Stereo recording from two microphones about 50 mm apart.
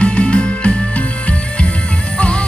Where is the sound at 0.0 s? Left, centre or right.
Left.